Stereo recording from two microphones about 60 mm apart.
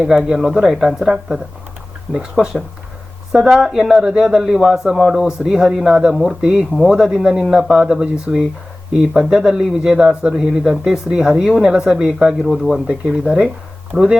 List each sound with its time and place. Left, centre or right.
0.3 s speech: centre
2.1 s speech: centre
2.4 s speech: centre
12.5 s speech: centre
12.9 s speech: centre